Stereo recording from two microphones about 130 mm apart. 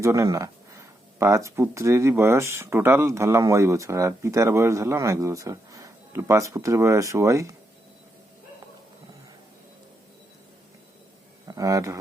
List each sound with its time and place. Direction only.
0.0 s speech: 25° right (ahead or behind)
11.4 s speech: 25° right (ahead or behind)